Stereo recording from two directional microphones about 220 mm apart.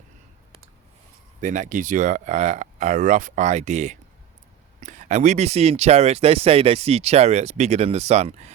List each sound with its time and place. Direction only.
1.4 s speech: 35° right (ahead or behind)